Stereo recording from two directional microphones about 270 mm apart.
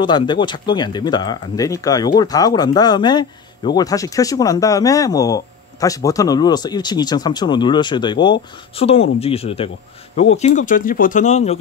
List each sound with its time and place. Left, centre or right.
0.0 s speech: centre